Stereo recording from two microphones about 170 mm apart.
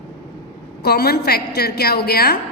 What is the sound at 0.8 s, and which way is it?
A woman's voice, 70° left (ahead or behind).